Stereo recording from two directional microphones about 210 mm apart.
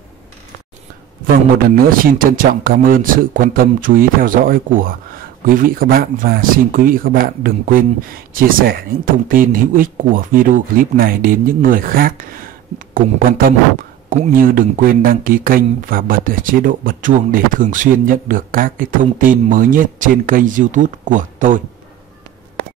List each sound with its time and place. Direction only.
2.0 s a man's voice: 40° right (ahead or behind)